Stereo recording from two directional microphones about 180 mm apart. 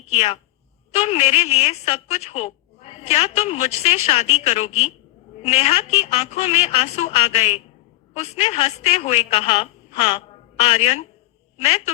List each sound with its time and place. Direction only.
0.1 s a woman's voice: 35° left (ahead or behind)